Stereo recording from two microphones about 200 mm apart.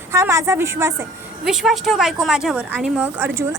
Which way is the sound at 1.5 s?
Centre (ahead or behind).